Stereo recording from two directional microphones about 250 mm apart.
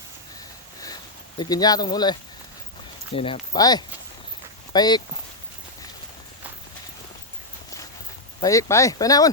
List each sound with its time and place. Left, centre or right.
1.4 s speech: centre
3.2 s speech: left
8.4 s speech: centre